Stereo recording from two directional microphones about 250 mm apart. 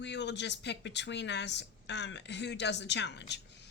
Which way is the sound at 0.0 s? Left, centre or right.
Left.